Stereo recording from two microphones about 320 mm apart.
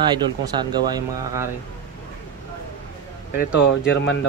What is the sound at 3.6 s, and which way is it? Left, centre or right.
Speech, left.